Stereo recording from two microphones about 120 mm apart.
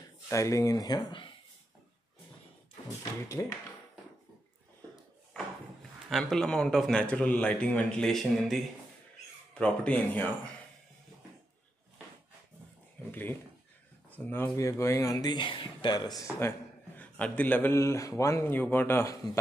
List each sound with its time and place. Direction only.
0.3 s speech: 25° left (ahead or behind); by 1.3 s 40° left (ahead or behind)
3.3 s a man's voice: 25° left (ahead or behind)
6.0 s a man's voice: centre (ahead or behind)
13.1 s a man's voice: 15° left (ahead or behind); by 16.1 s 35° left (ahead or behind)
16.3 s a man's voice: 20° left (ahead or behind)